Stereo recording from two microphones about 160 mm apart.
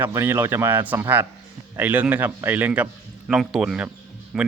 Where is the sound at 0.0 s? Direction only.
15° right (ahead or behind).